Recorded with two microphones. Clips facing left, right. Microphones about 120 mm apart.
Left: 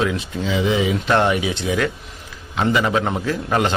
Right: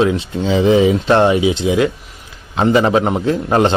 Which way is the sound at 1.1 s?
20° right (ahead or behind).